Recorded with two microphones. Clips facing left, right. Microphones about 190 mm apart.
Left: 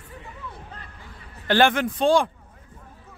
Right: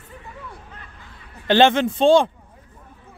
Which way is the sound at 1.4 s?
20° right (ahead or behind).